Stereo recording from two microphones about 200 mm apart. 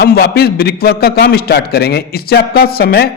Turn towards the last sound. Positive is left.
turn(degrees=50)  # may be behind; listen again after turning